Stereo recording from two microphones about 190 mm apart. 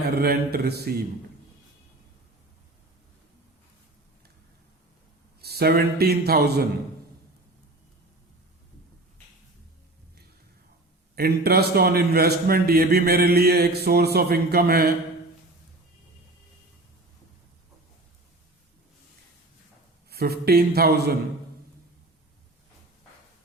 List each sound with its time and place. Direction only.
0.1 s a man's voice: 55° right (ahead or behind)
5.4 s a man's voice: 55° right (ahead or behind)
11.1 s a man's voice: 55° right (ahead or behind)
20.1 s a man's voice: 55° right (ahead or behind)